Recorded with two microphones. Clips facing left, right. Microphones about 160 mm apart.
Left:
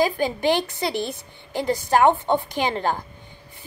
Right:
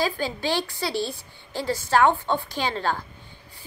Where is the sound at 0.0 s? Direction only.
20° left (ahead or behind).